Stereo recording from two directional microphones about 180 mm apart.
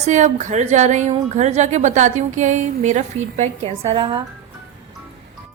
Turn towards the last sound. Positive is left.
turn(degrees=-30)  # may be behind; listen again after turning